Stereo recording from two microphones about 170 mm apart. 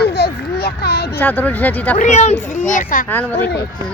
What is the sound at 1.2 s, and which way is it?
Speech, 10° left (ahead or behind).